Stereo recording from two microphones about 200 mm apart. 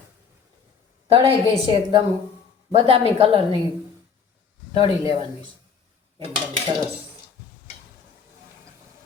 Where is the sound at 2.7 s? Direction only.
25° right (ahead or behind).